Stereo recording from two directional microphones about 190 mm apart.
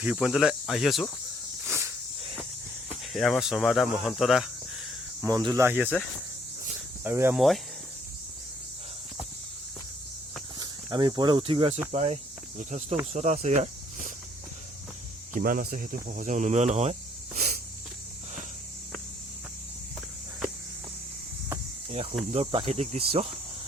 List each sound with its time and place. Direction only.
0.0 s speech: 5° right (ahead or behind)
1.6 s snake: 15° right (ahead or behind)
3.0 s speech: centre (ahead or behind)
5.2 s speech: 20° right (ahead or behind)
7.0 s speech: 10° right (ahead or behind)
7.3 s speech: centre (ahead or behind)
10.6 s speech: 20° right (ahead or behind); by 14.1 s 40° right (ahead or behind)
15.4 s speech: 45° right (ahead or behind)
22.3 s speech: 30° right (ahead or behind)